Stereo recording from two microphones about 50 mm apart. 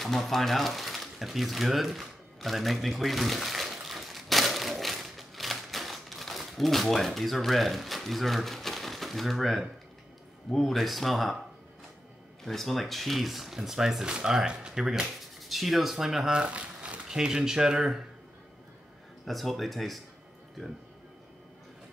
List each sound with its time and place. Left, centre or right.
0.0 s a sound: centre
10.5 s speech: centre
12.4 s speech: centre
16.3 s a sound: right
17.1 s speech: centre
19.2 s speech: centre